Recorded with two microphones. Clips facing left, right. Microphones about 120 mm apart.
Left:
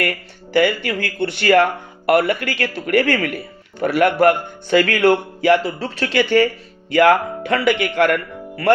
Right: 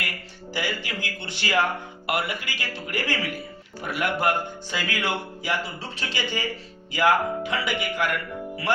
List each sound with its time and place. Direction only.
0.0 s speech: 60° left (ahead or behind)